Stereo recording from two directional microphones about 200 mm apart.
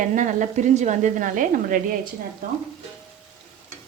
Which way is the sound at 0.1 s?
40° right (ahead or behind).